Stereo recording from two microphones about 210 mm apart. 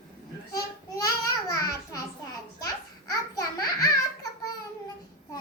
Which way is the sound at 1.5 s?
15° left (ahead or behind).